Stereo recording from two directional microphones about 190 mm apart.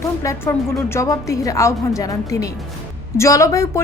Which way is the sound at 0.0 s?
15° left (ahead or behind).